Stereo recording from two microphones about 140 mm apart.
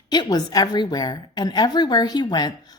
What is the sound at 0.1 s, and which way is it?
Speech, 30° left (ahead or behind).